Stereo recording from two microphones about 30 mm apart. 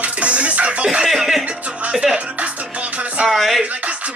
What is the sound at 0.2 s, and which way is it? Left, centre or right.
Music, right.